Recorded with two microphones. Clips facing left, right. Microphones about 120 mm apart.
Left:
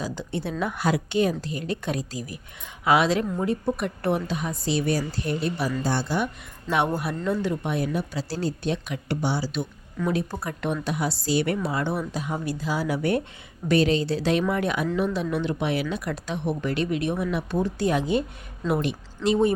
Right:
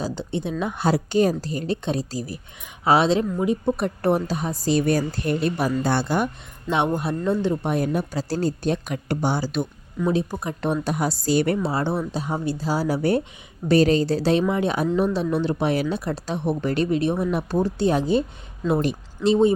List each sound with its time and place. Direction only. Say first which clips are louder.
0.0 s speech: right 3 dB; 25° right (ahead or behind)
3.4 s a woman's voice: right 3 dB; 15° right (ahead or behind)
3.8 s a woman's voice: right 4 dB; 40° right (ahead or behind); by 6.2 s 60° right (ahead or behind)
6.7 s speech: right 2 dB; 20° right (ahead or behind)
7.9 s a woman's voice: right 4 dB; 45° right (ahead or behind)
10.0 s a woman's voice: right 3 dB; 15° right (ahead or behind)
10.6 s a woman's voice: right 3 dB; 35° right (ahead or behind)
11.5 s speech: right 3 dB; 30° right (ahead or behind)
14.4 s speech: right 3 dB; 20° right (ahead or behind)
14.9 s speech: right 4 dB; 35° right (ahead or behind)